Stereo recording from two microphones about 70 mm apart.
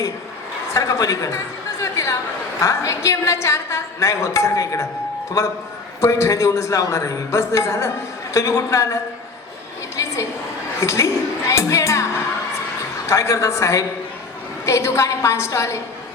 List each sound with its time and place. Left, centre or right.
0.7 s a man's voice: left
1.8 s chatter: left
2.6 s a man's voice: left
6.0 s a man's voice: left
10.8 s music: left
13.1 s a man's voice: left